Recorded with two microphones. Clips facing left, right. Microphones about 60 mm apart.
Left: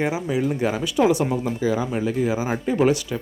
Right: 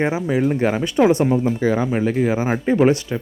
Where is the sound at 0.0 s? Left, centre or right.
Right.